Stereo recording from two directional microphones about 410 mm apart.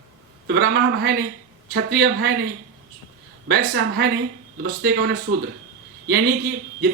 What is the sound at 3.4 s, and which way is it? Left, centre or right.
Speech, right.